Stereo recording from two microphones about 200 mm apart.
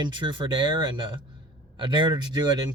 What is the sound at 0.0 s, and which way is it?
Speech, 25° right (ahead or behind).